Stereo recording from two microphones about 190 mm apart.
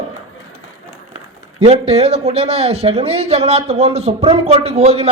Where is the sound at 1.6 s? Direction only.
35° right (ahead or behind).